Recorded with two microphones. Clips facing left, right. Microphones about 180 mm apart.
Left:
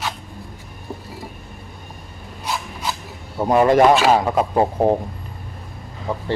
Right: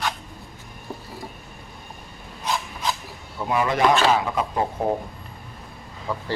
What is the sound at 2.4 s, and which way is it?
Rub, 10° left (ahead or behind).